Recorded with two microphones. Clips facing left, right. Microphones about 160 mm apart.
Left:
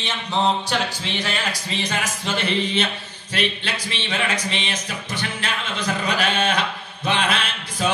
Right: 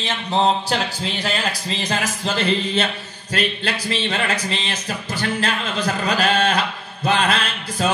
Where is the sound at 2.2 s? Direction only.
35° right (ahead or behind).